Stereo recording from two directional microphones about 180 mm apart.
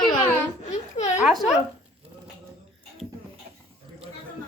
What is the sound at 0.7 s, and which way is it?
Speech, 40° left (ahead or behind).